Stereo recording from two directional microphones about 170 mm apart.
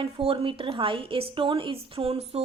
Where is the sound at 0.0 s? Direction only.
30° right (ahead or behind).